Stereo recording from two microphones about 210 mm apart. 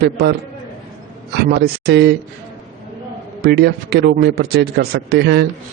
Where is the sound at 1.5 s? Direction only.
50° right (ahead or behind).